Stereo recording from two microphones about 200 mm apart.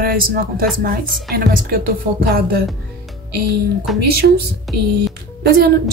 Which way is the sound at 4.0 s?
50° right (ahead or behind).